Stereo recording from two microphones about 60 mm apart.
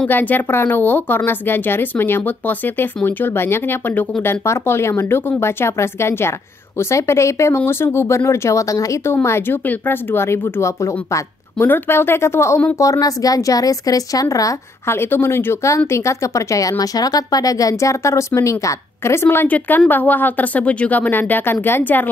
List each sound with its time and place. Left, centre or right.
0.1 s speech: left
9.0 s speech: left
11.5 s speech: left
12.7 s a woman's voice: left
14.9 s speech: left
19.1 s speech: left
19.4 s speech: left